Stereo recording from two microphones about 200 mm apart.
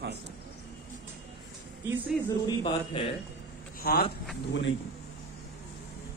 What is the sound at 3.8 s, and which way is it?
Speech, 50° left (ahead or behind).